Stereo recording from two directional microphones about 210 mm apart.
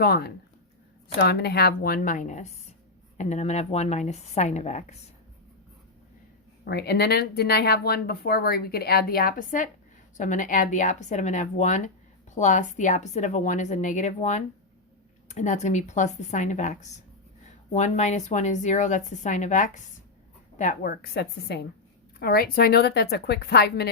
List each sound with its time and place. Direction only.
0.0 s speech: 50° left (ahead or behind); by 4.9 s 30° left (ahead or behind)
6.7 s speech: 50° left (ahead or behind)